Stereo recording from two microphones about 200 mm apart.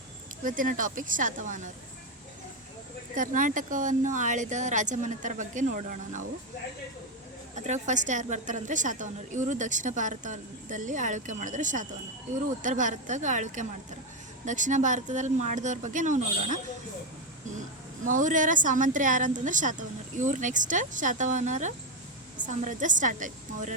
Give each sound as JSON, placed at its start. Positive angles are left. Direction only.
{"t": 0.4, "sound": "a woman's voice", "side_deg": -40}
{"t": 3.2, "sound": "a woman's voice", "side_deg": -40}
{"t": 7.5, "sound": "a woman's voice", "side_deg": -35}
{"t": 18.0, "sound": "a woman's voice", "side_deg": -40}